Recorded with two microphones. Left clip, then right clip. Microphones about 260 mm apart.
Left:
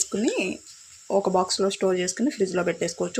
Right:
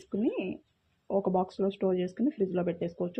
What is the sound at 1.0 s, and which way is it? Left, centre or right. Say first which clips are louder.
Speech: left 7 dB; centre.